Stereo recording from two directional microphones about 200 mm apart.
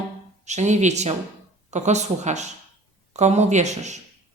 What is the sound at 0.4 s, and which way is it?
Speech, 35° right (ahead or behind).